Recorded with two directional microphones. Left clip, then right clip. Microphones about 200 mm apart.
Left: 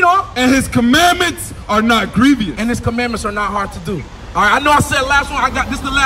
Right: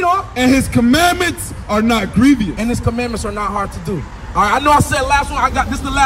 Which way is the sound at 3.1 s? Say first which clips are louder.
Left 2 dB; centre (ahead or behind).